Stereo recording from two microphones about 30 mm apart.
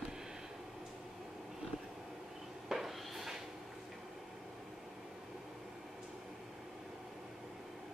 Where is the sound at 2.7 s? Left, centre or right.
Centre.